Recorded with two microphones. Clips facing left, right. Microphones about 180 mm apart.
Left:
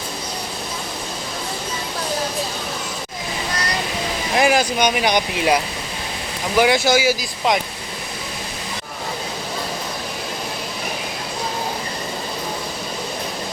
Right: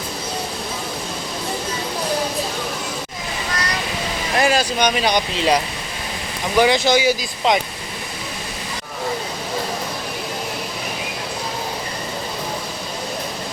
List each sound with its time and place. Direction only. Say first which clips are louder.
4.4 s speech: left 1 dB; 15° left (ahead or behind)
6.6 s speech: even; 10° left (ahead or behind)